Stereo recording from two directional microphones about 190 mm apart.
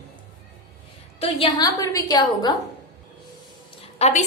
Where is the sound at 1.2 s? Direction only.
25° left (ahead or behind).